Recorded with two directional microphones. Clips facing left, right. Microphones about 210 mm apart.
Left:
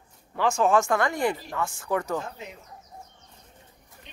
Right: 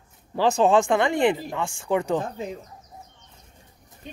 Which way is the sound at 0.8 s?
15° right (ahead or behind).